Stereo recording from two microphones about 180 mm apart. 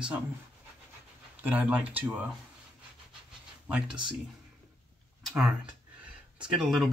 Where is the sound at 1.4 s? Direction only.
10° right (ahead or behind).